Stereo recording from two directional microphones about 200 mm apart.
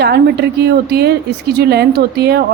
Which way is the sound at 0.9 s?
55° right (ahead or behind).